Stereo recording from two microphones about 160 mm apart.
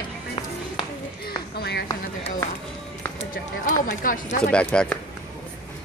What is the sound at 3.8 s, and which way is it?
Speech, 60° left (ahead or behind).